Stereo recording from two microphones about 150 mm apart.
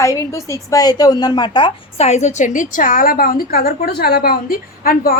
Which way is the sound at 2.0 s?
50° left (ahead or behind).